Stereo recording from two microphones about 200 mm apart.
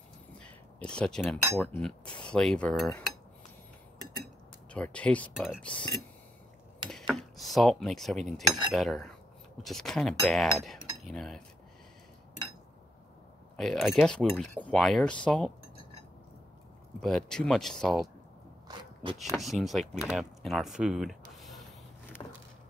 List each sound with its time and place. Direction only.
0.4 s a sound: 5° left (ahead or behind)
1.6 s speech: 5° left (ahead or behind)
4.7 s speech: 5° left (ahead or behind)
6.9 s cutlery: centre (ahead or behind)
8.7 s speech: centre (ahead or behind)
13.6 s speech: centre (ahead or behind)
17.0 s speech: centre (ahead or behind)
18.7 s a sound: 20° right (ahead or behind)
19.3 s speech: centre (ahead or behind)
22.2 s a sound: 20° left (ahead or behind)